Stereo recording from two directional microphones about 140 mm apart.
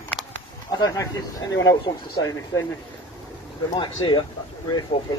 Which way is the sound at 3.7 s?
30° left (ahead or behind).